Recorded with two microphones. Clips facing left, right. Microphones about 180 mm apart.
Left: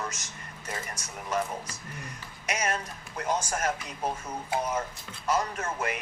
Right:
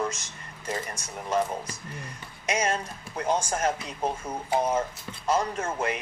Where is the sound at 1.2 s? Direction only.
30° right (ahead or behind).